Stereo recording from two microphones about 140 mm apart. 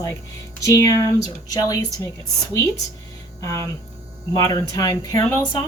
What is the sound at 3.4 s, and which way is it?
A woman's voice, 20° left (ahead or behind).